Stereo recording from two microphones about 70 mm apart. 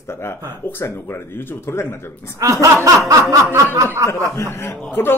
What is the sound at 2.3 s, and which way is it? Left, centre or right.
Speech, right.